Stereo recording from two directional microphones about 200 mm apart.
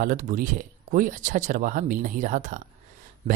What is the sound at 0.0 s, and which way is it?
Speech, 40° right (ahead or behind).